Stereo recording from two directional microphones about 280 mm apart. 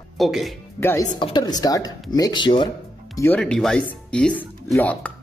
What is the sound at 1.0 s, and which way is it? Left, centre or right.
Speech, centre.